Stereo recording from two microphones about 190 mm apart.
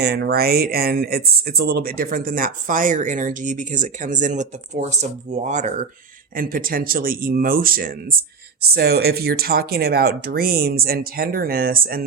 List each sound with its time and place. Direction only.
0.0 s speech: 55° right (ahead or behind); by 5.8 s 40° right (ahead or behind)
6.3 s speech: 50° right (ahead or behind)